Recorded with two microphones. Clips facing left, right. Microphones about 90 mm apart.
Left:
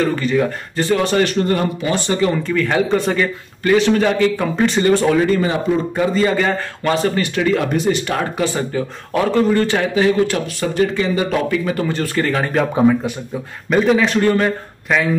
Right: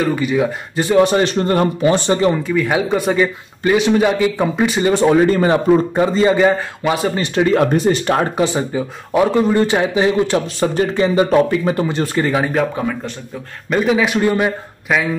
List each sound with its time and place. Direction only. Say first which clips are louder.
0.0 s speech: even; 10° right (ahead or behind); by 2.3 s 30° right (ahead or behind)
2.3 s speech: even; 10° right (ahead or behind)
4.9 s speech: right 2 dB; 25° right (ahead or behind)
6.1 s speech: right 5 dB; 20° right (ahead or behind)
7.2 s speech: right 3 dB; 30° right (ahead or behind)
8.4 s speech: right 2 dB; 15° right (ahead or behind)
12.7 s a man's voice: left 7 dB; 15° left (ahead or behind)
13.7 s speech: left 1 dB; centre (ahead or behind)